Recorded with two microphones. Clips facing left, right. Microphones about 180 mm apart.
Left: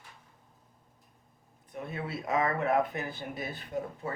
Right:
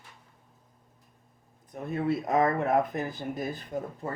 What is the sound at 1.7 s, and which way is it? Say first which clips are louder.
Speech: right 8 dB; 45° right (ahead or behind).